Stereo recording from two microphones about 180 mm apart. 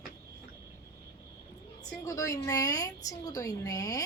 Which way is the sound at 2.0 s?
20° left (ahead or behind).